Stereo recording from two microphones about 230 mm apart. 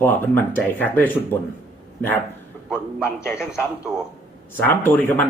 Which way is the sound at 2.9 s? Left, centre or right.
Centre.